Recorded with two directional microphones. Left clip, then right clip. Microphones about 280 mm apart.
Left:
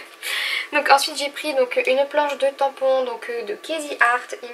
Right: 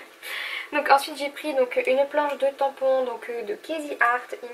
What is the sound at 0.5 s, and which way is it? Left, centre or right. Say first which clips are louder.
Speech: left 3 dB; centre.